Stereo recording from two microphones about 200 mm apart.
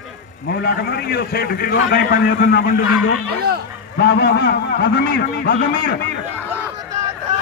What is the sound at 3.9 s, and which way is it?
A man's voice, 60° left (ahead or behind).